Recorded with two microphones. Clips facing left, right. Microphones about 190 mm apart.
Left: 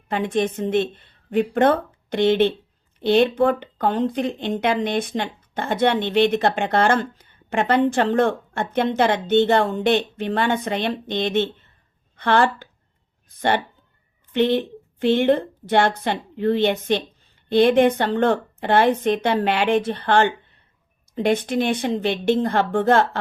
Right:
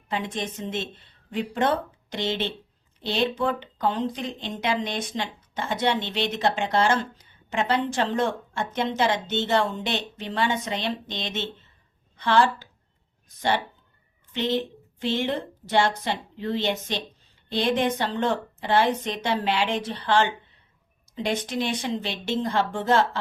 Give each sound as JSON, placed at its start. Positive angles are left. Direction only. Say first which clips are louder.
{"t": 0.1, "sound": "speech", "louder": "left 8 dB", "side_deg": 55}
{"t": 14.3, "sound": "speech", "louder": "left 7 dB", "side_deg": 55}